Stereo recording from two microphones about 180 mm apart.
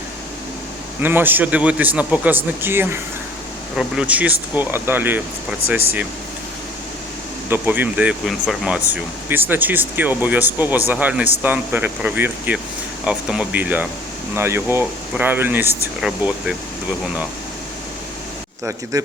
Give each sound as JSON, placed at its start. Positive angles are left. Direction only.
{"t": 1.0, "sound": "speech", "side_deg": -10}
{"t": 7.5, "sound": "speech", "side_deg": -10}
{"t": 18.6, "sound": "speech", "side_deg": -15}